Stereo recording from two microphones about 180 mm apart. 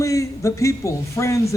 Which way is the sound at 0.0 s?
15° left (ahead or behind).